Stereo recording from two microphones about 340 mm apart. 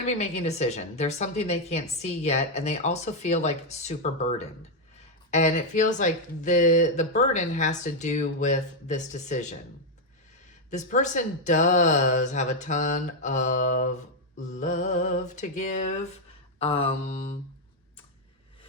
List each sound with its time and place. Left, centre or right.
0.0 s speech: centre
10.7 s speech: left
16.6 s mantra: centre